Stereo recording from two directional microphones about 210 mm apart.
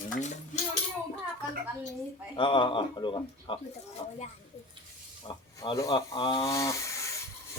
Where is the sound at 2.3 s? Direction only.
25° left (ahead or behind).